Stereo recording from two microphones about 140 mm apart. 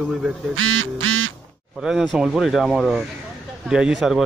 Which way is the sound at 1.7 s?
Centre (ahead or behind).